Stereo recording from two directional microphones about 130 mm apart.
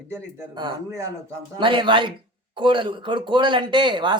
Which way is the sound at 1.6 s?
40° right (ahead or behind).